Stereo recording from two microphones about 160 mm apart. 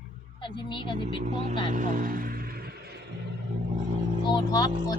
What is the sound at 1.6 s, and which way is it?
Speech, 55° right (ahead or behind).